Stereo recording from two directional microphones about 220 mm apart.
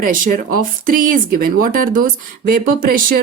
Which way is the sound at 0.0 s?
40° right (ahead or behind).